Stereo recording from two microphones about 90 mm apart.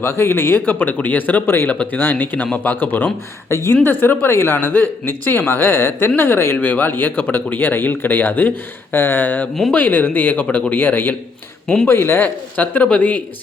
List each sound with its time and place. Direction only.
0.0 s speech: 25° left (ahead or behind)